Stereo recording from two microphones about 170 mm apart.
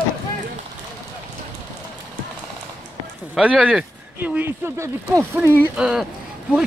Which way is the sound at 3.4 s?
5° right (ahead or behind).